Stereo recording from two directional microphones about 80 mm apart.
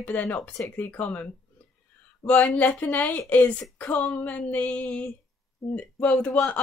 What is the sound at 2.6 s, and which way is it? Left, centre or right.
Speech, centre.